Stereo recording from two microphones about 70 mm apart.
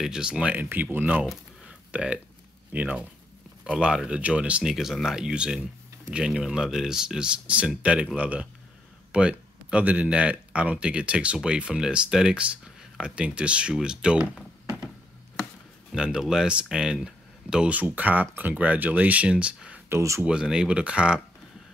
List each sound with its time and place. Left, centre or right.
0.0 s speech: centre
0.7 s speech: right
1.7 s a sound: centre
2.7 s speech: right
4.7 s speech: centre
15.9 s speech: centre
19.9 s speech: right
20.2 s speech: centre